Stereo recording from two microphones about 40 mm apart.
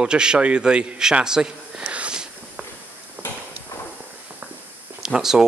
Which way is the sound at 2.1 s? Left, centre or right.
Centre.